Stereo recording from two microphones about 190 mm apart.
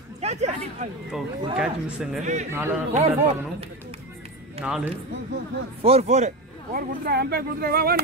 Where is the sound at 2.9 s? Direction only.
35° right (ahead or behind).